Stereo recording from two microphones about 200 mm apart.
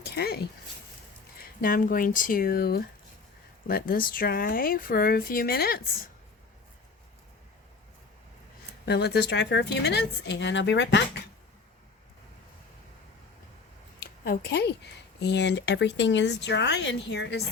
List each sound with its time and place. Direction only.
0.0 s a sound: 50° left (ahead or behind)
1.6 s speech: 45° left (ahead or behind)
8.9 s speech: 55° left (ahead or behind)
14.0 s speech: 50° left (ahead or behind)